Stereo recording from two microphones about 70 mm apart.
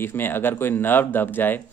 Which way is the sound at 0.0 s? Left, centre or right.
Left.